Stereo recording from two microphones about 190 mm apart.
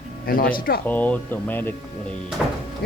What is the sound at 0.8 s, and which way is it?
Speech, 10° left (ahead or behind).